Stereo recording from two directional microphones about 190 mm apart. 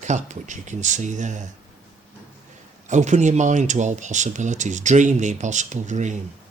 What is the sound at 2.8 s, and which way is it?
Speech, 40° right (ahead or behind).